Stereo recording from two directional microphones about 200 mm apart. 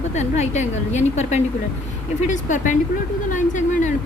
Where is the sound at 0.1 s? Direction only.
35° left (ahead or behind).